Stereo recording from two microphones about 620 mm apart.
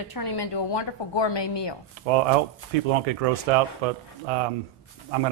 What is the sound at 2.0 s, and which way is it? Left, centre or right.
Speech, right.